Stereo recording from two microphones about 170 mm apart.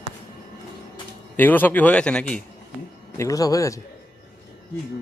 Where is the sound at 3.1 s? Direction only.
20° left (ahead or behind).